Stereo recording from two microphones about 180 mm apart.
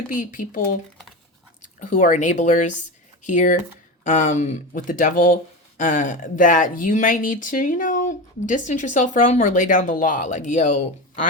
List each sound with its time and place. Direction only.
0.1 s speech: 50° left (ahead or behind)
1.8 s speech: 45° left (ahead or behind)